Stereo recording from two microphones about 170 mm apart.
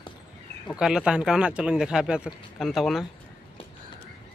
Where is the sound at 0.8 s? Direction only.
5° right (ahead or behind).